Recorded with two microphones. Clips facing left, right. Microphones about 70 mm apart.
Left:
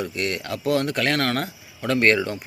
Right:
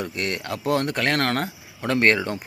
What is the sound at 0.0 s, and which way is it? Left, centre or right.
Speech, right.